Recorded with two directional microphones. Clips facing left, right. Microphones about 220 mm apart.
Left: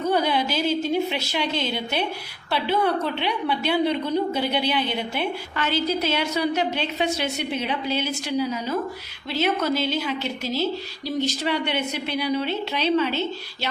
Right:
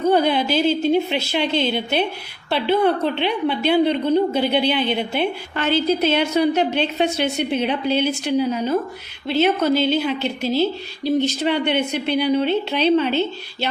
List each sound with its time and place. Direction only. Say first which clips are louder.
0.2 s a woman's voice: right 5 dB; 25° right (ahead or behind)
8.0 s a woman's voice: right 5 dB; 60° right (ahead or behind)
9.2 s a woman's voice: right 6 dB; 25° right (ahead or behind)